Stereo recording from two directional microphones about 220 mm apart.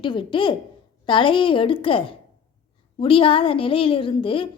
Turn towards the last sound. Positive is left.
turn(degrees=25)  # may be behind; listen again after turning